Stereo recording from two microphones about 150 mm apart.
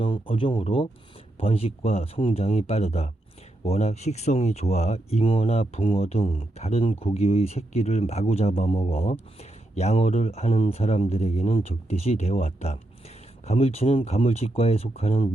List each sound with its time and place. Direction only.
0.0 s speech: 35° left (ahead or behind)